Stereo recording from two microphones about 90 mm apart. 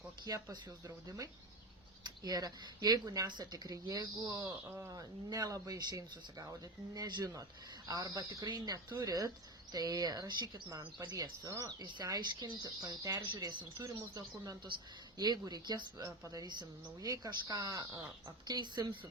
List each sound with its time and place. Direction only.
0.3 s speech: 35° right (ahead or behind)
4.2 s speech: 25° right (ahead or behind)
4.9 s speech: 40° right (ahead or behind)
11.8 s speech: 50° right (ahead or behind)
18.4 s speech: 55° right (ahead or behind)